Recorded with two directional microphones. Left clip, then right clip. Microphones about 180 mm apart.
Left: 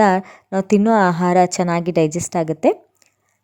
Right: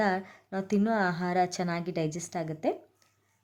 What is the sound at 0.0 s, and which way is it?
Speech, 45° left (ahead or behind).